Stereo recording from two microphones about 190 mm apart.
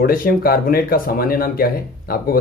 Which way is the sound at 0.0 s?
50° left (ahead or behind).